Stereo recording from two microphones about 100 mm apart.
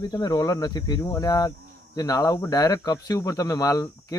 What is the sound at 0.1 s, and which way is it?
Speech, 40° left (ahead or behind).